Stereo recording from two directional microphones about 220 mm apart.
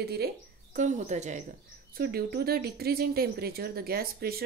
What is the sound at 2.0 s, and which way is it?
Speech, 45° right (ahead or behind).